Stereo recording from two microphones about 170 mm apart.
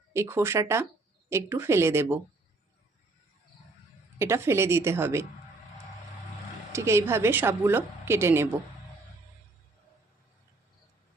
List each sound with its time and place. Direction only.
0.1 s a woman's voice: 15° right (ahead or behind)
4.2 s a woman's voice: 15° right (ahead or behind)
6.7 s a woman's voice: 15° right (ahead or behind)